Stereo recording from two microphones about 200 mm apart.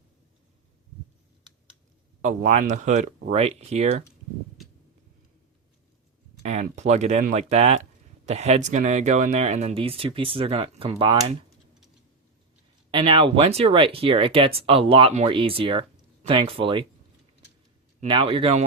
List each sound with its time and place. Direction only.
2.2 s speech: 35° right (ahead or behind)
6.4 s speech: 35° right (ahead or behind)
12.9 s speech: 25° right (ahead or behind)
18.1 s speech: 25° right (ahead or behind)